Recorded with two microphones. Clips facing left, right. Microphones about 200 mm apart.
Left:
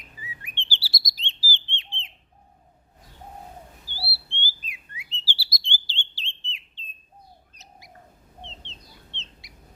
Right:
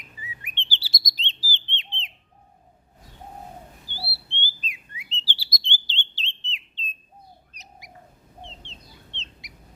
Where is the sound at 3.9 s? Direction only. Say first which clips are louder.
Right 1 dB; 20° right (ahead or behind).